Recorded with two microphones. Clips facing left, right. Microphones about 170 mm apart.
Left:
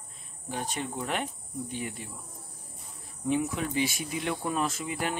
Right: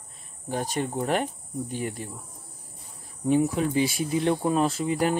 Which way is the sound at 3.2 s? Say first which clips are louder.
Right 6 dB; 35° right (ahead or behind).